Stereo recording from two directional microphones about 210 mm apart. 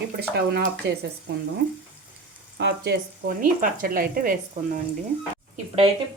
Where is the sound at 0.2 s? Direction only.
50° right (ahead or behind).